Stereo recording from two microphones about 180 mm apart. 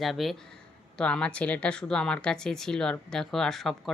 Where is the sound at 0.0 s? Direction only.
Centre (ahead or behind).